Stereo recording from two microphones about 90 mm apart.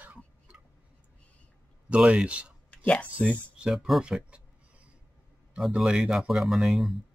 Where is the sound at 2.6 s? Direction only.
15° left (ahead or behind).